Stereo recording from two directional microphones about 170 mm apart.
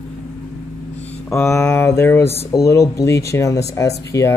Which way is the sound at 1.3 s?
10° left (ahead or behind).